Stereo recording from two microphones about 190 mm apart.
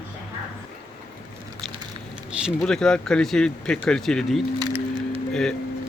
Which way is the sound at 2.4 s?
5° left (ahead or behind).